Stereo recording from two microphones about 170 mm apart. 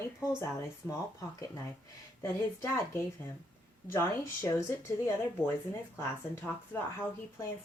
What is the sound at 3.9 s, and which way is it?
Speech, 15° left (ahead or behind).